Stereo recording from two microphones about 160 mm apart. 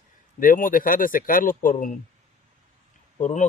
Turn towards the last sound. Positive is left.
turn(degrees=50)  # may be behind; listen again after turning